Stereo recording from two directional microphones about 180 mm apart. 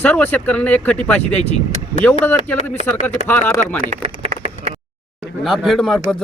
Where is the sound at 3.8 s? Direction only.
40° right (ahead or behind).